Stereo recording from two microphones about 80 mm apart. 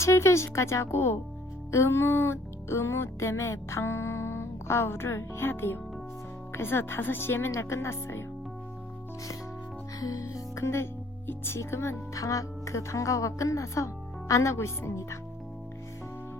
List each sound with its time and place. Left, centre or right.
0.0 s speech: left
10.0 s music: left
11.3 s speech: left